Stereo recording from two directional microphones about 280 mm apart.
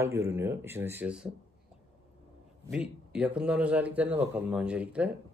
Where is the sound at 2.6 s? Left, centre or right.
Centre.